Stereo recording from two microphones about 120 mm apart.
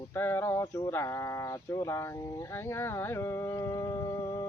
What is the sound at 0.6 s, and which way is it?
Mantra, 30° left (ahead or behind).